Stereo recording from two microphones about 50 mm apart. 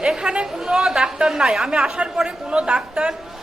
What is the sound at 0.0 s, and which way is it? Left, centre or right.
A woman's voice, centre.